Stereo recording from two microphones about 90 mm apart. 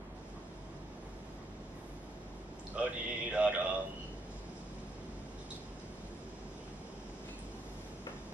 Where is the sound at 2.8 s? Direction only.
15° right (ahead or behind).